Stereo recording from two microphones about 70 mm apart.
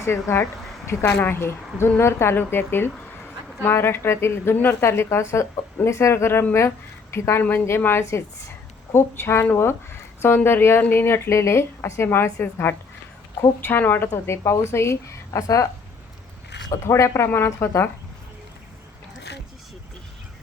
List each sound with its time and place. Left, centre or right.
0.0 s a woman's voice: left
14.3 s speech: left
16.8 s speech: left